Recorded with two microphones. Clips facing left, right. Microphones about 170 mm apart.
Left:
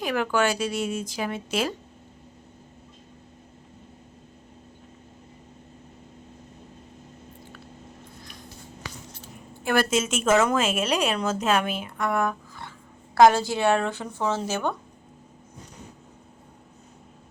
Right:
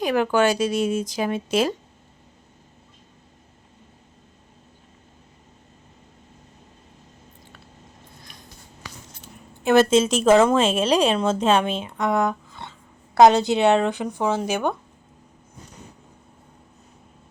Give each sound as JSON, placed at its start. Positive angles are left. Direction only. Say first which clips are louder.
{"t": 0.0, "sound": "a woman's voice", "louder": "right 5 dB", "side_deg": -20}
{"t": 9.6, "sound": "a woman's voice", "louder": "right 7 dB", "side_deg": -25}